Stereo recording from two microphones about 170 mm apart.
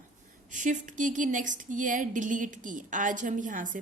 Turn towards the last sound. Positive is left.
turn(degrees=-50)  # may be behind; listen again after turning